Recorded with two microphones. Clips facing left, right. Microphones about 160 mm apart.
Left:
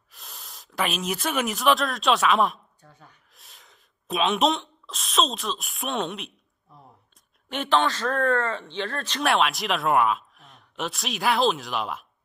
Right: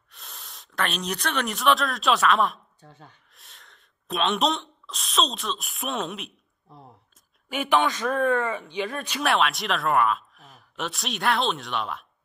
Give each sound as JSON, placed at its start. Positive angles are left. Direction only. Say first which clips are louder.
{"t": 0.1, "sound": "speech", "louder": "even", "side_deg": 0}
{"t": 2.8, "sound": "speech", "louder": "right 3 dB", "side_deg": -25}
{"t": 3.3, "sound": "speech", "louder": "even", "side_deg": 0}
{"t": 7.4, "sound": "speech", "louder": "even", "side_deg": -10}
{"t": 9.2, "sound": "speech", "louder": "left 1 dB", "side_deg": 0}